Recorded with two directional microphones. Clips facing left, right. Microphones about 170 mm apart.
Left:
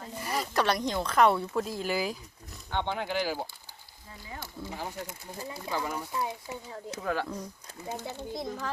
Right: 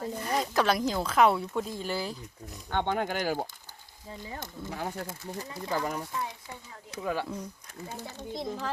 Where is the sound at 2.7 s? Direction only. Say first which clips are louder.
Right 2 dB; 50° right (ahead or behind).